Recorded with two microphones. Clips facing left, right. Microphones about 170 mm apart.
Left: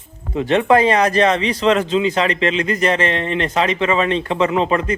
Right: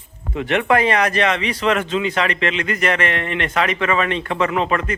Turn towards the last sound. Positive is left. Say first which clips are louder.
# left 3 dB
turn(degrees=30)  # may be behind; listen again after turning